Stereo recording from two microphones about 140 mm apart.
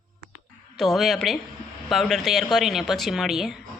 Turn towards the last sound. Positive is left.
turn(degrees=0)  # may be behind; listen again after turning